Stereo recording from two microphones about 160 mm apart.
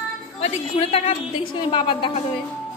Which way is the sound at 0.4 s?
40° left (ahead or behind).